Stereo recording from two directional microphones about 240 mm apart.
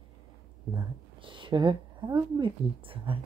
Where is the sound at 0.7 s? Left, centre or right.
Centre.